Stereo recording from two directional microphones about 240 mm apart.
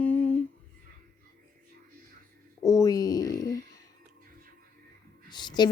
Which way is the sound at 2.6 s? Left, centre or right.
Centre.